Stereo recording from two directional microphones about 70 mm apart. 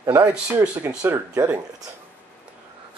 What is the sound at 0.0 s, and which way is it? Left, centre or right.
Speech, right.